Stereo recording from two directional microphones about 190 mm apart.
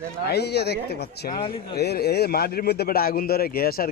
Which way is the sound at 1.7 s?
55° left (ahead or behind).